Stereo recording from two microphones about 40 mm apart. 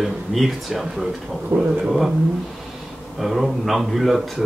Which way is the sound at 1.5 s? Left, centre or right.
Right.